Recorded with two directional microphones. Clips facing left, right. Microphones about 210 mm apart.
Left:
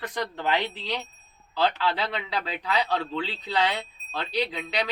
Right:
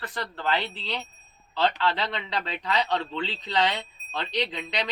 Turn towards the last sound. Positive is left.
turn(degrees=5)  # may be behind; listen again after turning